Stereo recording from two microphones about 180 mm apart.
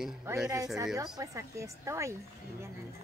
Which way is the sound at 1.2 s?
15° right (ahead or behind).